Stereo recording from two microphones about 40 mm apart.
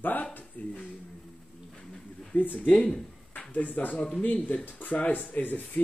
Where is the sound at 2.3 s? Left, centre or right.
Left.